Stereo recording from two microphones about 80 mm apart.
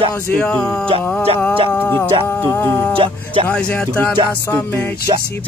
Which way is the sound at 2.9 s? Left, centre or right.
Right.